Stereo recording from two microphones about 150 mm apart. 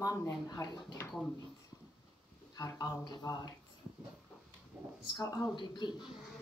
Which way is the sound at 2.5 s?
25° left (ahead or behind).